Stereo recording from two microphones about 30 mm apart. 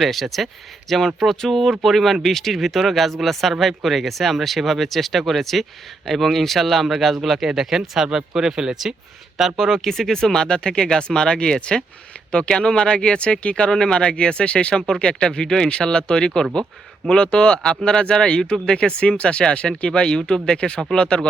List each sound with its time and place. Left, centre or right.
0.0 s speech: centre; by 8.8 s right
9.4 s speech: centre
9.7 s speech: centre; by 13.7 s left
13.7 s speech: left
14.8 s speech: left
15.8 s speech: left
19.9 s speech: left
20.6 s speech: left